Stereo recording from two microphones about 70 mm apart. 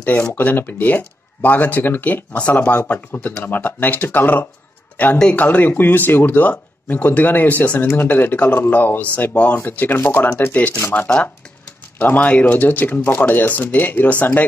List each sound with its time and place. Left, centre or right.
0.0 s speech: left
2.8 s speech: left